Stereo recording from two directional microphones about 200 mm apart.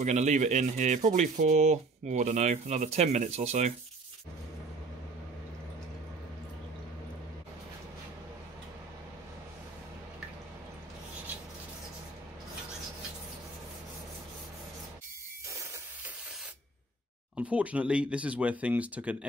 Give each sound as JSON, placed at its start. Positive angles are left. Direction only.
{"t": 0.0, "sound": "speech", "side_deg": -35}
{"t": 17.4, "sound": "speech", "side_deg": -5}